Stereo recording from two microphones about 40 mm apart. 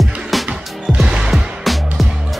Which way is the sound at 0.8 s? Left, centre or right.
Centre.